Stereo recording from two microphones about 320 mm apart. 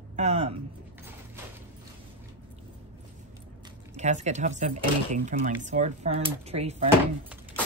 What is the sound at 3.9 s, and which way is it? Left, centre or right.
Speech, right.